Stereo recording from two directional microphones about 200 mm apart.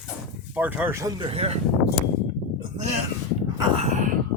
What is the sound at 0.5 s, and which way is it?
Speech, 10° right (ahead or behind).